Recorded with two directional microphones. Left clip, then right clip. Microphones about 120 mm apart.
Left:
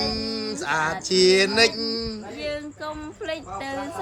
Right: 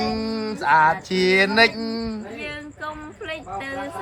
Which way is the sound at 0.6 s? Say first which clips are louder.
Right 9 dB; 15° left (ahead or behind).